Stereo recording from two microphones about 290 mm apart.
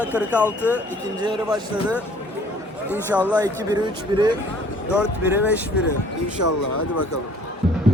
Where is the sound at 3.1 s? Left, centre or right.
Centre.